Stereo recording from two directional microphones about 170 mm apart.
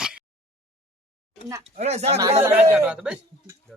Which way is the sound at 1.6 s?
40° right (ahead or behind).